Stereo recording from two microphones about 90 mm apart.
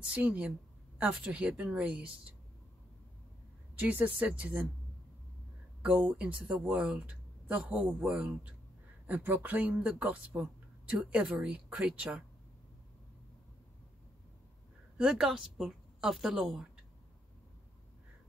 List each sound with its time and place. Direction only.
0.1 s speech: 15° right (ahead or behind)
3.7 s speech: 20° right (ahead or behind)
5.8 s speech: 10° right (ahead or behind)
15.0 s a woman's voice: 5° right (ahead or behind)